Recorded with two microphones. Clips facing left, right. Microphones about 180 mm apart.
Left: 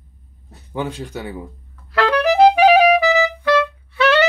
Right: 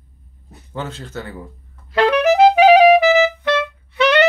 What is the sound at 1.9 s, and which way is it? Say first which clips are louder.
Clarinet: right 2 dB; 20° right (ahead or behind).